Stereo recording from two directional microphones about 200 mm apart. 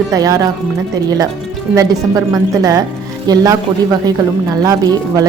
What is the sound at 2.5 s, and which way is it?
Speech, 15° right (ahead or behind).